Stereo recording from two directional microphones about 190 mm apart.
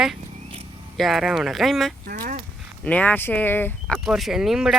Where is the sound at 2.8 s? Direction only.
5° left (ahead or behind).